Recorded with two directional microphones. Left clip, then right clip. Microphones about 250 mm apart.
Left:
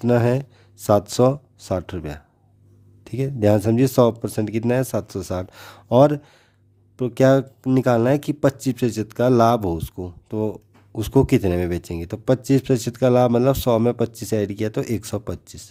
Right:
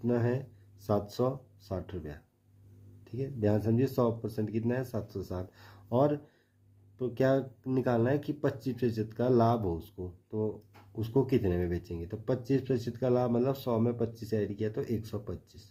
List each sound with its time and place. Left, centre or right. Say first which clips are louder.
0.0 s speech: left 12 dB; left